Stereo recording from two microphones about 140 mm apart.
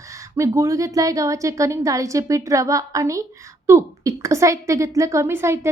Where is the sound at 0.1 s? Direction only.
20° right (ahead or behind).